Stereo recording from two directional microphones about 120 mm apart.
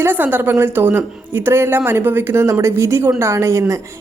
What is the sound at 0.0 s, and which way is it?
Speech, 15° right (ahead or behind).